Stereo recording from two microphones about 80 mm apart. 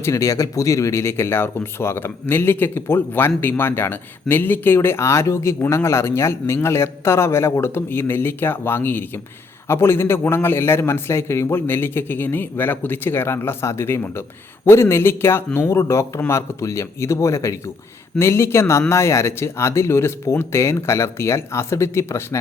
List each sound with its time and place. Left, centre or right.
0.0 s a man's voice: left